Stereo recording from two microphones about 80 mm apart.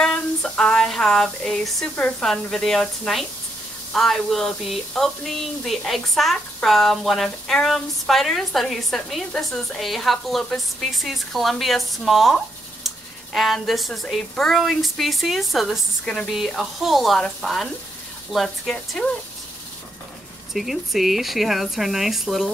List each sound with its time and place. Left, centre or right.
0.0 s a sound: centre
2.0 s speech: centre
2.2 s speech: centre
12.8 s a sound: centre
14.1 s speech: centre
20.5 s speech: centre